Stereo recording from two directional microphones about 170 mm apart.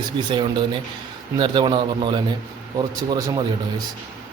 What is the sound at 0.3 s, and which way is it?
A man's voice, 30° right (ahead or behind).